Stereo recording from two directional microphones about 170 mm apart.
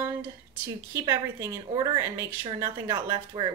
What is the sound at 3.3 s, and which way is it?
Speech, 30° right (ahead or behind).